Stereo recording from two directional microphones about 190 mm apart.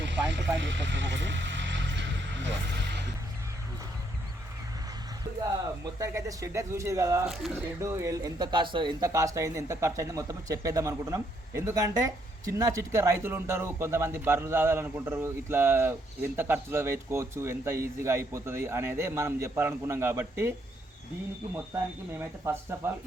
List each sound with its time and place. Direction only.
0.0 s vehicle: 70° right (ahead or behind)
5.4 s speech: 20° right (ahead or behind)
7.3 s speech: centre (ahead or behind)
7.8 s speech: 15° right (ahead or behind)
21.5 s speech: 10° right (ahead or behind)